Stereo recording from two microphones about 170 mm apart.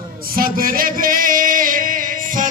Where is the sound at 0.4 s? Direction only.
55° right (ahead or behind).